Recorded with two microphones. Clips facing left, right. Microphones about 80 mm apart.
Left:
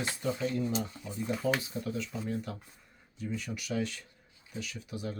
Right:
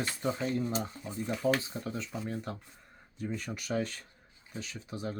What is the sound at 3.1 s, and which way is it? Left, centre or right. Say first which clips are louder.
Speech: even; right.